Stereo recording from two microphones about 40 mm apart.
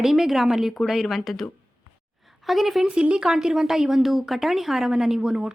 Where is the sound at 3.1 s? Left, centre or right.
Centre.